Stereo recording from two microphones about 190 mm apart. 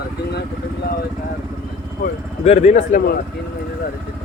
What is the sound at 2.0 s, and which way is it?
Speech, 45° left (ahead or behind).